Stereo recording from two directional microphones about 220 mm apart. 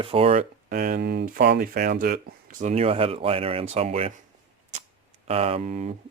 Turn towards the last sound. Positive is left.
turn(degrees=-30)  # may be behind; listen again after turning